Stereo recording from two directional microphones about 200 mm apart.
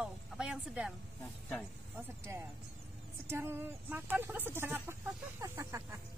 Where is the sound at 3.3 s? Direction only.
10° right (ahead or behind).